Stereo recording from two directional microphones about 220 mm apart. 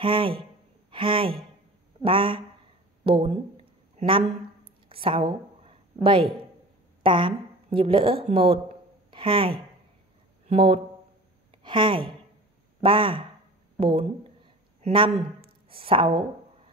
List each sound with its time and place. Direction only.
0.0 s speech: 25° right (ahead or behind)
3.1 s a sound: 25° right (ahead or behind)
7.0 s a woman's voice: 20° right (ahead or behind)